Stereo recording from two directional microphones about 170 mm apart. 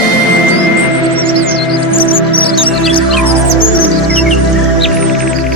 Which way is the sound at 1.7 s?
30° left (ahead or behind).